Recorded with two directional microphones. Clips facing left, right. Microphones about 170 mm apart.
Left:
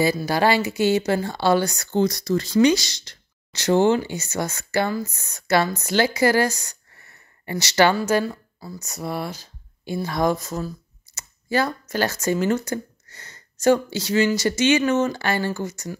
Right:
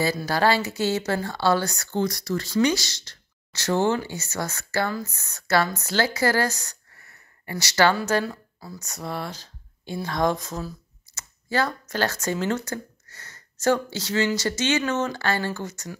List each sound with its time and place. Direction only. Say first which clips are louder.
0.0 s speech: left 3 dB; 15° left (ahead or behind)
7.0 s a sound: left 2 dB; 25° left (ahead or behind)
8.0 s speech: left 3 dB; 10° left (ahead or behind)